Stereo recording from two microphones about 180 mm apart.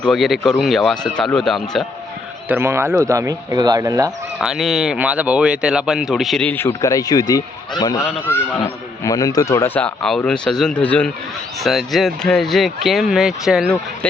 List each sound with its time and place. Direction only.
0.0 s speech: centre (ahead or behind)
2.5 s speech: 15° right (ahead or behind)
4.4 s speech: centre (ahead or behind)